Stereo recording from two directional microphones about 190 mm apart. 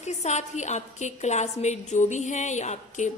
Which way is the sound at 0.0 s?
35° left (ahead or behind).